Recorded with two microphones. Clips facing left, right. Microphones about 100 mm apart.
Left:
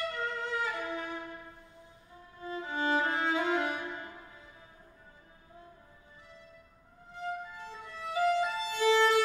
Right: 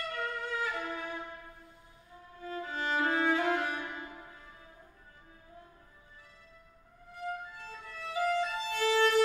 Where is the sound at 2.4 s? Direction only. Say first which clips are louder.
Left 3 dB; 20° left (ahead or behind).